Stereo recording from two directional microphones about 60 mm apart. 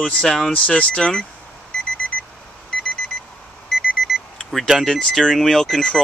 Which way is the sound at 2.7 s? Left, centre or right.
Centre.